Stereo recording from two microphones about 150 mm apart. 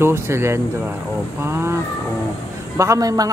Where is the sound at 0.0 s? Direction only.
15° right (ahead or behind).